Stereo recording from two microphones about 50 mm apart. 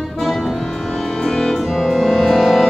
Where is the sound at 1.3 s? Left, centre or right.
Centre.